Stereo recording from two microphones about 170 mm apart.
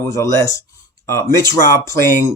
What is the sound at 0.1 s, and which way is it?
Speech, 20° left (ahead or behind).